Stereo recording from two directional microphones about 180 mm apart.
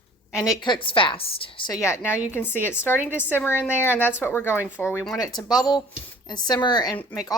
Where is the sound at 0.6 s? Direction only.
25° left (ahead or behind).